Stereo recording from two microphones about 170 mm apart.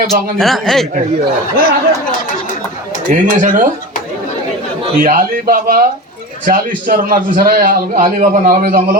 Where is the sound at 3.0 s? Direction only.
50° right (ahead or behind).